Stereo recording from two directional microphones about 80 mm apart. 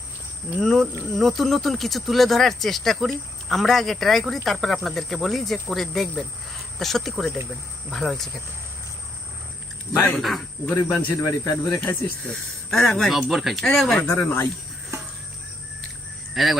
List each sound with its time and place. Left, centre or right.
0.6 s speech: centre
10.2 s speech: centre
11.2 s speech: left
11.8 s speech: left
12.7 s speech: centre
14.1 s speech: left
16.3 s speech: centre